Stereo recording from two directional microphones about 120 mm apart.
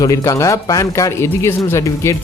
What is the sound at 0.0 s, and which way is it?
Speech, 30° left (ahead or behind).